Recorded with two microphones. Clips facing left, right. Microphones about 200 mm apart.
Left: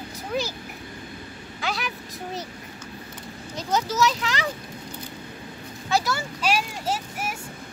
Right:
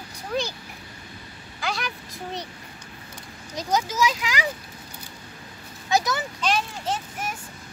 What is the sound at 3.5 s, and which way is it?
Speech, 15° right (ahead or behind).